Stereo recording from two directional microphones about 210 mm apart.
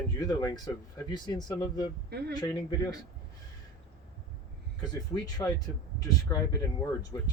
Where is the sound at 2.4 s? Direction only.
20° left (ahead or behind).